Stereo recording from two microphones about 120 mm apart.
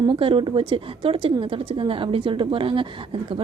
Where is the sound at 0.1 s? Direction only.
50° right (ahead or behind).